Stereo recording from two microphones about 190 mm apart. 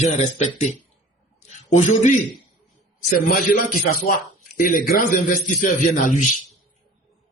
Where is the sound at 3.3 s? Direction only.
45° left (ahead or behind).